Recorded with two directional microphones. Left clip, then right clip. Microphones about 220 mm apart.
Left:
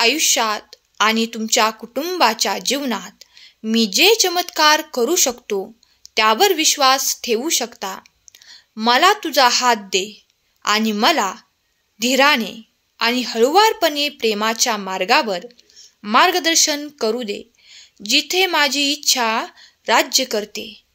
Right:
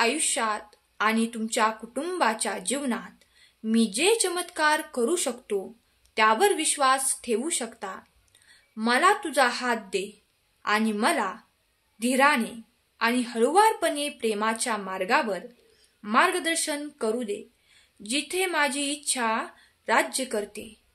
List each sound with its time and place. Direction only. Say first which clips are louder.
0.0 s speech: left 9 dB; 35° left (ahead or behind)